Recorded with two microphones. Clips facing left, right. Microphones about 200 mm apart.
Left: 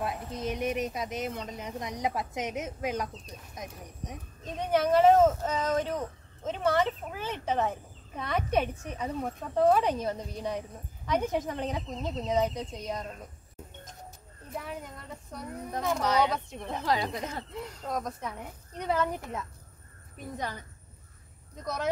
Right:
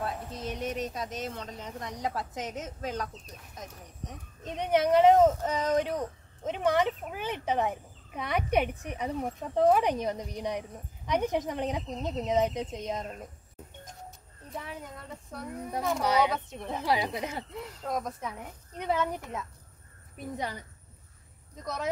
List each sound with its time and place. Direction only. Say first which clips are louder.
0.0 s speech: left 2 dB; 10° left (ahead or behind)
4.5 s speech: right 1 dB; 20° right (ahead or behind)
15.3 s speech: right 1 dB; centre (ahead or behind)
20.2 s speech: right 1 dB; 10° right (ahead or behind)